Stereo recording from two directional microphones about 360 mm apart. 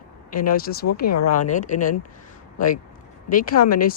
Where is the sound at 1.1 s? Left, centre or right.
Left.